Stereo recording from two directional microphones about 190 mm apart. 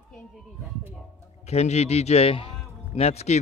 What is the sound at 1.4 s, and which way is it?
A man's voice, 35° left (ahead or behind).